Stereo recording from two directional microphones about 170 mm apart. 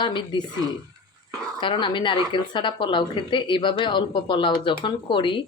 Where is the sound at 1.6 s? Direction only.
30° left (ahead or behind).